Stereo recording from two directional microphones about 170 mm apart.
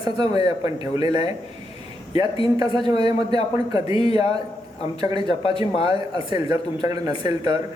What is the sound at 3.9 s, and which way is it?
Speech, 35° left (ahead or behind).